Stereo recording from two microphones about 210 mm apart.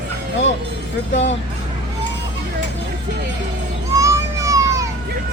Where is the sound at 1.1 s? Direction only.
30° left (ahead or behind).